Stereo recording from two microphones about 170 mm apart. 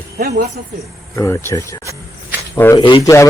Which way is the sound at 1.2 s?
15° left (ahead or behind).